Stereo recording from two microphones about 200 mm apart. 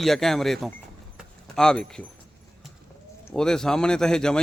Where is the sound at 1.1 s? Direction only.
5° left (ahead or behind).